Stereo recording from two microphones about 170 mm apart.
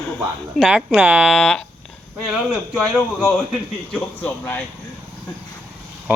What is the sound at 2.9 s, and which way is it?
Speech, 5° left (ahead or behind).